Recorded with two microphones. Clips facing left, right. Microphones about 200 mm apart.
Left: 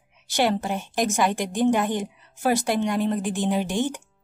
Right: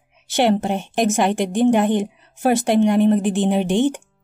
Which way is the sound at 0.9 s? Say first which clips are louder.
Right 4 dB; 25° right (ahead or behind).